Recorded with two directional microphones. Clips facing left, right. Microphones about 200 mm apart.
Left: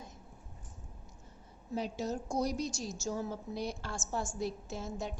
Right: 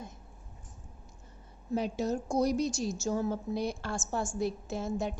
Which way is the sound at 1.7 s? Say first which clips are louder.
Right 5 dB; 60° right (ahead or behind).